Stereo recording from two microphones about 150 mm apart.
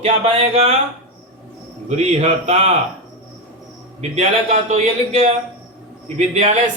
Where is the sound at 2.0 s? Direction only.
45° right (ahead or behind).